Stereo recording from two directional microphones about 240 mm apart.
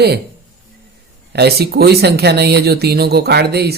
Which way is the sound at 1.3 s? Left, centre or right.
Right.